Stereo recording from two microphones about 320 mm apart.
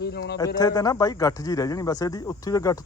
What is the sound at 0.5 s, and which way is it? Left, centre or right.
A man's voice, centre.